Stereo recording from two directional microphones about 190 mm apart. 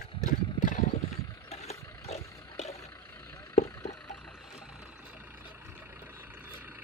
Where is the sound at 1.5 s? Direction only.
35° left (ahead or behind).